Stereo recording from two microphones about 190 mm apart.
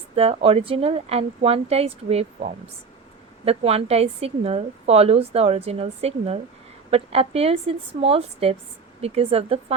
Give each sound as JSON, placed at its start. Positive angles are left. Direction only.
{"t": 0.2, "sound": "a woman's voice", "side_deg": -30}